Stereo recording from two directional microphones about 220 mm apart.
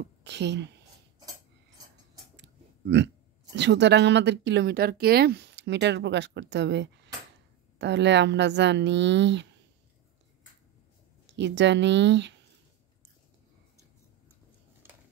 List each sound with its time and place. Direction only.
0.2 s a woman's voice: 50° right (ahead or behind)
2.3 s clicking: 50° right (ahead or behind)
3.5 s speech: 50° right (ahead or behind)
11.3 s speech: 55° right (ahead or behind)